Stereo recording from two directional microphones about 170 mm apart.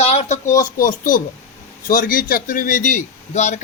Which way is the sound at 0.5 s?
50° left (ahead or behind).